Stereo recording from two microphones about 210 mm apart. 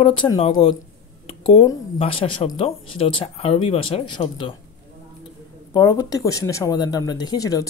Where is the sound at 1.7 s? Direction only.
25° left (ahead or behind).